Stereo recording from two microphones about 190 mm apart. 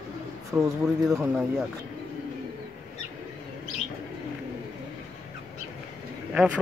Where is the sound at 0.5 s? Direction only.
5° right (ahead or behind).